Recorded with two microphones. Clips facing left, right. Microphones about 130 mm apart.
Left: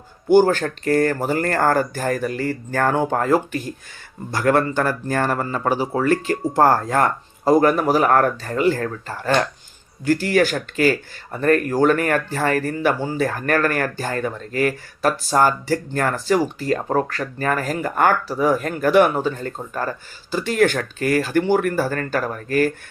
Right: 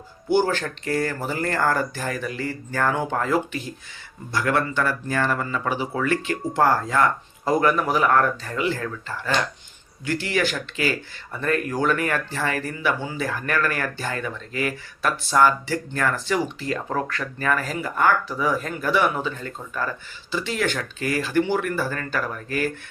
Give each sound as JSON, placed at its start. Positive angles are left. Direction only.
{"t": 0.3, "sound": "speech", "side_deg": 45}
{"t": 19.1, "sound": "speech", "side_deg": 40}